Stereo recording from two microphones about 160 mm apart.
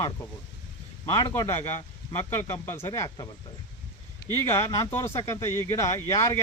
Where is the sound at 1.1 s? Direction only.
20° left (ahead or behind).